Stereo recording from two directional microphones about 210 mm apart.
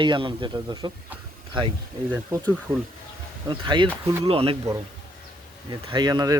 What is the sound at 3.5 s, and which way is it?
Speech, 20° right (ahead or behind).